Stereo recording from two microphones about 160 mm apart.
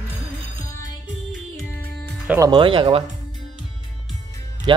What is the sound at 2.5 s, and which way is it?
Speech, 30° right (ahead or behind).